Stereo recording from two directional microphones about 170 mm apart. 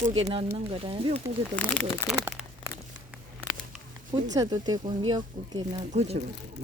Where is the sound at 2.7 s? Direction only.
60° left (ahead or behind).